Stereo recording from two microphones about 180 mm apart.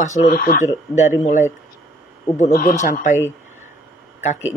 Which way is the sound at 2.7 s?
40° left (ahead or behind).